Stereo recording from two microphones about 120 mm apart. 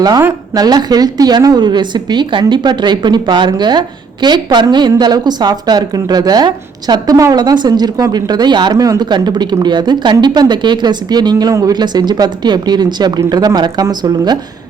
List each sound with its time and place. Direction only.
0.5 s a woman's voice: 35° right (ahead or behind)